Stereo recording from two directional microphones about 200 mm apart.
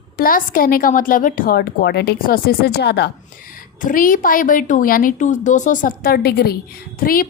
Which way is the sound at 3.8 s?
45° left (ahead or behind).